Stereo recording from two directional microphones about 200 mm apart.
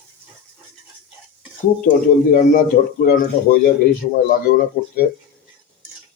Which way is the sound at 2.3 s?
40° left (ahead or behind).